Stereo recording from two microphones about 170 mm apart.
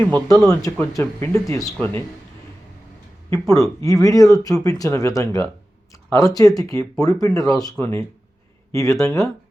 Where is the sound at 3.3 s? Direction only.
20° left (ahead or behind).